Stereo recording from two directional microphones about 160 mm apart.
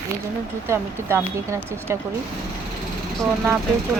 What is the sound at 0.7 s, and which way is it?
Speech, 15° right (ahead or behind).